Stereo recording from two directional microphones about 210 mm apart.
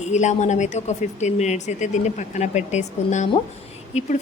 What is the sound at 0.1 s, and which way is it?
A woman's voice, 35° left (ahead or behind).